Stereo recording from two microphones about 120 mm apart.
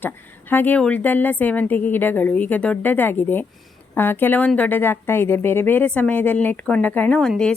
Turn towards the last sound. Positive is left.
turn(degrees=5)  # may be behind; listen again after turning